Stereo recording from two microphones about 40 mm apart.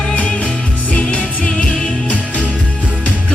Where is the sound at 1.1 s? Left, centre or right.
Left.